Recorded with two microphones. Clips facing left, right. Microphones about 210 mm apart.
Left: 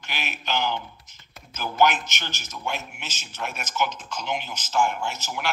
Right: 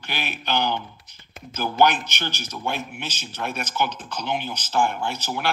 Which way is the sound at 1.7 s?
30° right (ahead or behind).